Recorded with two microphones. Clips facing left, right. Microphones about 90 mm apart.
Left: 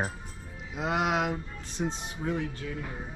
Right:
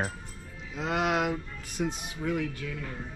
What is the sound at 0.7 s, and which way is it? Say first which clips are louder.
Speech: even; 5° left (ahead or behind).